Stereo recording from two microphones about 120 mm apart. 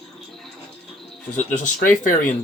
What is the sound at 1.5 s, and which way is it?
Speech, 90° left.